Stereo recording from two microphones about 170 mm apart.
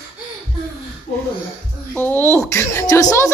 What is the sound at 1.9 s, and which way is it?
Speech, 10° left (ahead or behind).